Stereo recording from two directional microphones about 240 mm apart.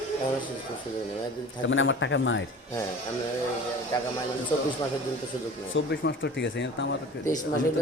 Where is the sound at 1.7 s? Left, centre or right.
Left.